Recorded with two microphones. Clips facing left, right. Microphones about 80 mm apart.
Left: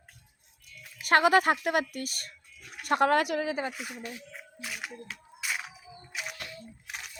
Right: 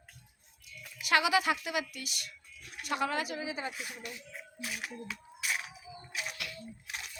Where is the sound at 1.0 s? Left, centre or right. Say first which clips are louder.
Left 6 dB; left.